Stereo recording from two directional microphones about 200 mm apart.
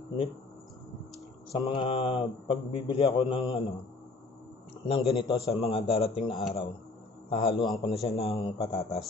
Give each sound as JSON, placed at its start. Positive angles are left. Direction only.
{"t": 1.6, "sound": "a man's voice", "side_deg": 25}
{"t": 4.8, "sound": "a man's voice", "side_deg": 30}